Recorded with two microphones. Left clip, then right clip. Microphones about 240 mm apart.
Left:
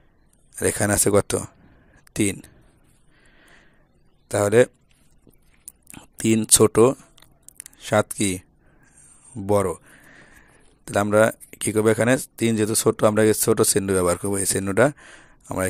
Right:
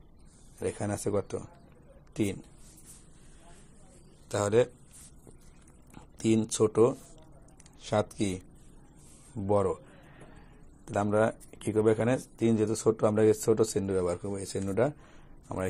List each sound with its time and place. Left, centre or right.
0.6 s speech: left
4.3 s speech: left
5.9 s a sound: left
6.6 s speech: left
7.6 s speech: left
9.5 s a sound: left
10.9 s speech: left